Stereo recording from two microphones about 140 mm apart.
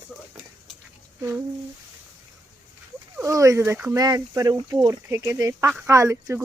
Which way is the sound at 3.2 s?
20° right (ahead or behind).